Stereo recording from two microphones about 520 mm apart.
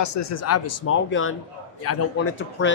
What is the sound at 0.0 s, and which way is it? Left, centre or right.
Speech, left.